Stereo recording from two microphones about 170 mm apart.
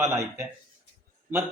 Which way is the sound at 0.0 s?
15° right (ahead or behind).